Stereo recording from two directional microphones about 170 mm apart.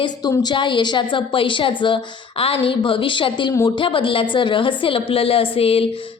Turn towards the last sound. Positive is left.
turn(degrees=35)  # may be behind; listen again after turning